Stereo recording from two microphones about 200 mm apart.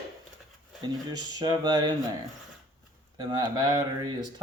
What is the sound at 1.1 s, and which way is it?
Speech, 20° right (ahead or behind).